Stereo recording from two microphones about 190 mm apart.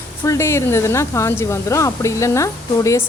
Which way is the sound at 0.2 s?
15° left (ahead or behind).